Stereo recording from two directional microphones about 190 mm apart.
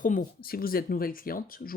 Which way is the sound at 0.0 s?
45° left (ahead or behind).